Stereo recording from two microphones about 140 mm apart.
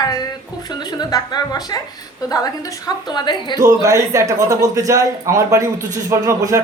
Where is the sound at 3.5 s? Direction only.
25° right (ahead or behind).